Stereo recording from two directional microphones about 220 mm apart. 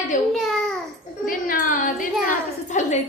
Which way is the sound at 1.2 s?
40° left (ahead or behind).